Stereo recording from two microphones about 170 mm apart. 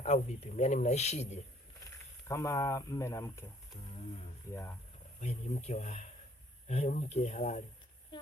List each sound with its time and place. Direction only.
0.0 s speech: 40° left (ahead or behind)
2.2 s speech: 20° left (ahead or behind)
4.5 s speech: 15° left (ahead or behind)
5.2 s speech: 40° left (ahead or behind)